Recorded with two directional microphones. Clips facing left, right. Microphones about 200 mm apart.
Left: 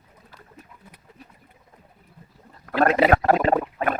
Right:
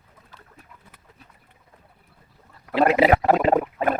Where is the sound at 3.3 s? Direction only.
5° right (ahead or behind).